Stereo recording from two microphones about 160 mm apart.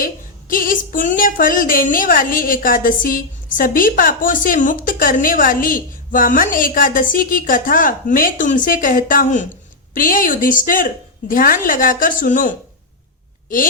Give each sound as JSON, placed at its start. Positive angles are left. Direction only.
{"t": 0.0, "sound": "speech", "side_deg": 60}